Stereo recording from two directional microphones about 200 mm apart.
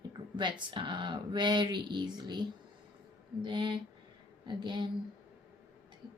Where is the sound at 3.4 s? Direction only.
25° right (ahead or behind).